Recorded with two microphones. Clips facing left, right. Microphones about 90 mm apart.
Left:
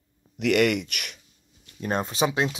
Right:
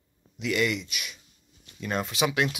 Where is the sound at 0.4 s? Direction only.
65° left (ahead or behind).